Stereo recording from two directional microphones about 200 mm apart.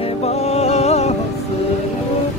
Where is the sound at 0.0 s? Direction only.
30° left (ahead or behind).